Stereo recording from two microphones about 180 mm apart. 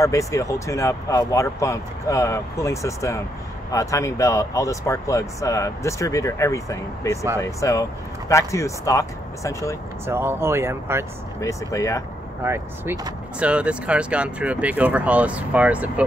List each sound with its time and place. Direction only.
0.0 s speech: 15° left (ahead or behind)
10.0 s speech: 15° right (ahead or behind)
11.4 s speech: 15° left (ahead or behind)
12.4 s speech: 15° right (ahead or behind)
13.4 s speech: 5° right (ahead or behind)